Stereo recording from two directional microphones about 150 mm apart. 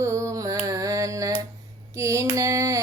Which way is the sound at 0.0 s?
20° right (ahead or behind).